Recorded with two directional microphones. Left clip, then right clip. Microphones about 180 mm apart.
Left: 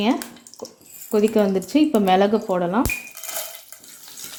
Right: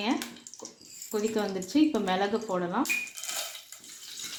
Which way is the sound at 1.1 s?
55° left (ahead or behind).